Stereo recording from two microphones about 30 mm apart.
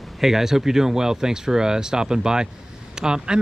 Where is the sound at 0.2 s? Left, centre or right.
Centre.